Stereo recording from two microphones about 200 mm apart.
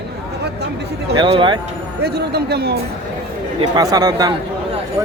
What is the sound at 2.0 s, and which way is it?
Speech, 55° right (ahead or behind).